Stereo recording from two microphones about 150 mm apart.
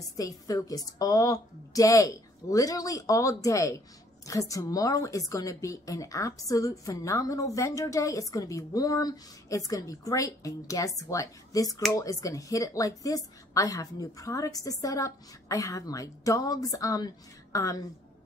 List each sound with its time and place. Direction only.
0.2 s a woman's voice: 25° left (ahead or behind)